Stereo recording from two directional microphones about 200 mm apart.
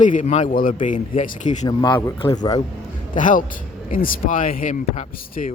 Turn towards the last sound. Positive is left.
turn(degrees=35)  # may be behind; listen again after turning